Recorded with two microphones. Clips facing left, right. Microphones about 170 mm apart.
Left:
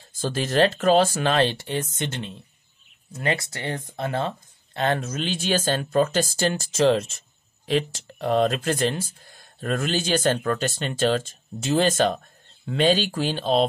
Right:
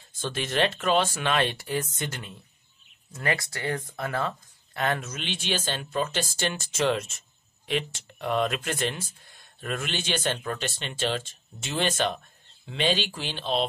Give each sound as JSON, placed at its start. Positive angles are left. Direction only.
{"t": 0.2, "sound": "speech", "side_deg": 35}